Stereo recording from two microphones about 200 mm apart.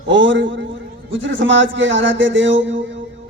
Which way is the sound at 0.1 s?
70° right (ahead or behind).